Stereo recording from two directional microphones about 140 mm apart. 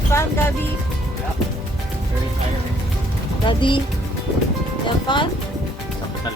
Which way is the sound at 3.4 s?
35° left (ahead or behind).